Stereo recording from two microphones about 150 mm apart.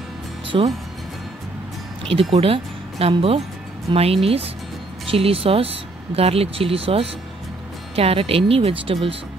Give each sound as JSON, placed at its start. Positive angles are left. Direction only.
{"t": 0.5, "sound": "speech", "side_deg": -35}
{"t": 2.3, "sound": "speech", "side_deg": -40}